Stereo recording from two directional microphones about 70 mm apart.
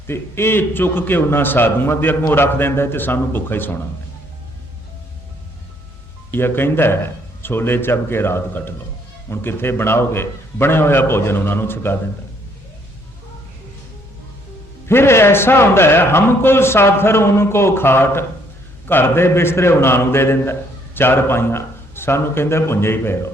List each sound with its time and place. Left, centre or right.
0.1 s speech: left
6.3 s speech: left
14.8 s speech: left